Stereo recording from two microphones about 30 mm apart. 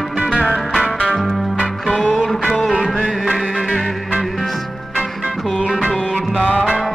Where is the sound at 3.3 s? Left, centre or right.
Centre.